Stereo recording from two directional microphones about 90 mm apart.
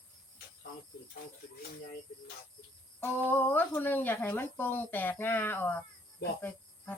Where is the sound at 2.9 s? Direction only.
20° left (ahead or behind).